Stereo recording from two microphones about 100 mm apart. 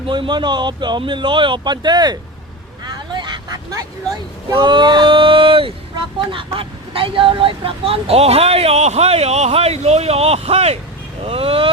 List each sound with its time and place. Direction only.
0.1 s speech: 50° right (ahead or behind)
2.8 s vehicle: 45° right (ahead or behind)
4.4 s speech: 45° right (ahead or behind); by 10.8 s 90° right
11.2 s speech: 70° right (ahead or behind)